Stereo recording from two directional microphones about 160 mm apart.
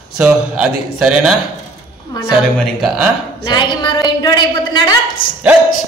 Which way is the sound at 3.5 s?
25° left (ahead or behind).